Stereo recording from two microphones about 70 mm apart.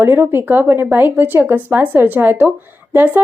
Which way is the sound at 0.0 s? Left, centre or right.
Right.